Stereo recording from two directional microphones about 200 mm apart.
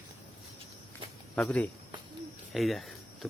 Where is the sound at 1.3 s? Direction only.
5° left (ahead or behind).